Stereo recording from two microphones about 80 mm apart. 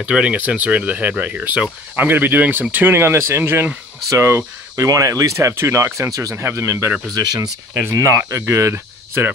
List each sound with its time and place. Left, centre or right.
0.0 s speech: centre; by 4.5 s right
4.7 s speech: right
7.9 s speech: right
8.2 s cricket: right